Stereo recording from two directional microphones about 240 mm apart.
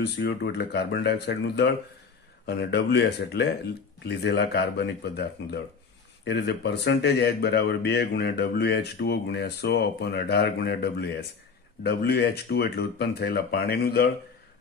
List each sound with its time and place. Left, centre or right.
0.0 s speech: left